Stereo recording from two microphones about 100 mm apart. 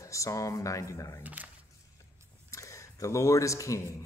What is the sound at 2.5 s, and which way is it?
Speech, 30° left (ahead or behind).